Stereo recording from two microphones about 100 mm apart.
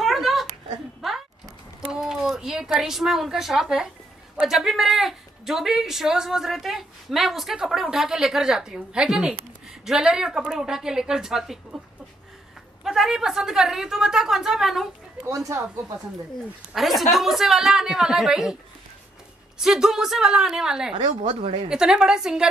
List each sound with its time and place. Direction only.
0.0 s a sound: centre (ahead or behind)
1.9 s speech: 5° right (ahead or behind)
12.8 s speech: 5° right (ahead or behind)
15.2 s speech: 30° right (ahead or behind)
16.7 s speech: centre (ahead or behind)
19.6 s speech: 5° right (ahead or behind)
20.9 s a woman's voice: 55° right (ahead or behind)
21.6 s a woman's voice: 10° right (ahead or behind)